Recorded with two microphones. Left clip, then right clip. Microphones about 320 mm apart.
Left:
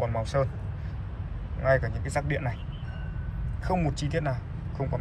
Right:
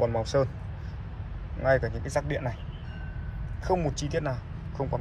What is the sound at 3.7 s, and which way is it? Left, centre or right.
Speech, centre.